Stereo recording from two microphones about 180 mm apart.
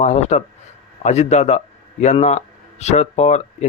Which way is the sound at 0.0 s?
40° left (ahead or behind).